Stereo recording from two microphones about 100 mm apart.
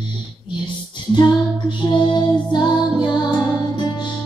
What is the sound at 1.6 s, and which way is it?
Music, 50° left (ahead or behind).